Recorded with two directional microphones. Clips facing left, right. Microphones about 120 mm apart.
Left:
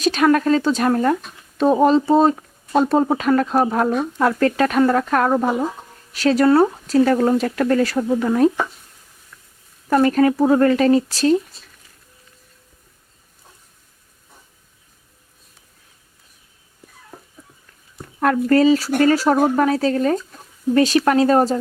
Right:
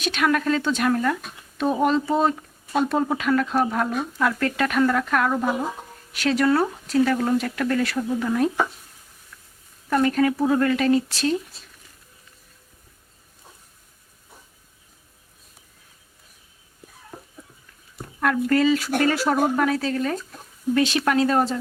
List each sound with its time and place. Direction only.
0.0 s speech: 40° left (ahead or behind)
9.9 s speech: 40° left (ahead or behind)
18.2 s speech: 35° left (ahead or behind)